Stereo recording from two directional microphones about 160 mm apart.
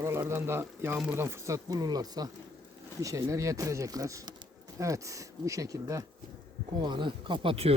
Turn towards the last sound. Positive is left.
turn(degrees=-35)  # may be behind; listen again after turning